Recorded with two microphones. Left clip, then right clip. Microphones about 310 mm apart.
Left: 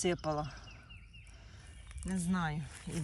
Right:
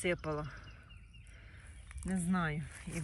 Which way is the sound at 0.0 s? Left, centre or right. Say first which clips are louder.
Left 2 dB; centre.